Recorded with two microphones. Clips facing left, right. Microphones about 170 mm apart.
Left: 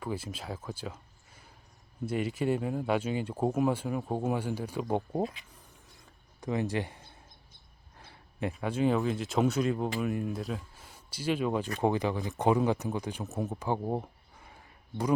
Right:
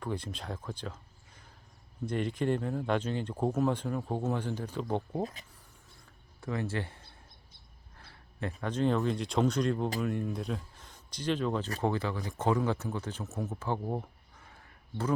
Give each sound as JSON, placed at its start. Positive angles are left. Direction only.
{"t": 0.0, "sound": "speech", "side_deg": 5}
{"t": 6.4, "sound": "speech", "side_deg": 15}